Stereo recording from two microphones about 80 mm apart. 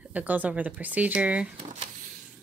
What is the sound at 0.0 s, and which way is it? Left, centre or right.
Speech, centre.